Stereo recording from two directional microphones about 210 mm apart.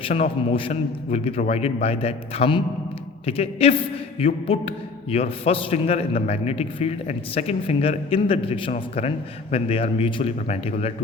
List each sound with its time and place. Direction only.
0.0 s a man's voice: 30° left (ahead or behind)